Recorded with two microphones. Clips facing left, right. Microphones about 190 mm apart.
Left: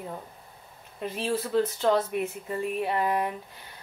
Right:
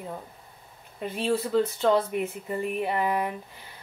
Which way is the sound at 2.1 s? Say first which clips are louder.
Right 1 dB; 60° right (ahead or behind).